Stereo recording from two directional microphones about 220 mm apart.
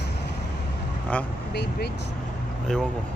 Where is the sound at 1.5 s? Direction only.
50° left (ahead or behind).